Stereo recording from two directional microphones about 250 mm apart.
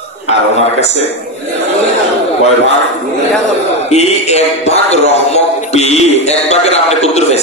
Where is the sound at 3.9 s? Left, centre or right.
Left.